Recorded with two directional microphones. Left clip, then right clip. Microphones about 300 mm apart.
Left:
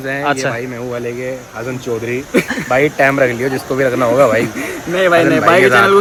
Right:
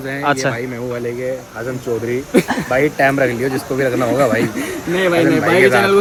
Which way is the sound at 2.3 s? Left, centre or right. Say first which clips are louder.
Even; centre.